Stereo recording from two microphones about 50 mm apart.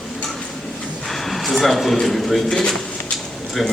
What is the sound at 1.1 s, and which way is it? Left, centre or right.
A man's voice, centre.